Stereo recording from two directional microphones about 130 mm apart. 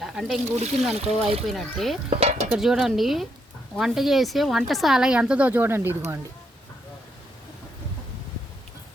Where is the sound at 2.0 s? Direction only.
55° right (ahead or behind).